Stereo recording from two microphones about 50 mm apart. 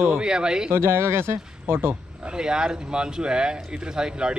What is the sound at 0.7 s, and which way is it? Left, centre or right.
Speech, right.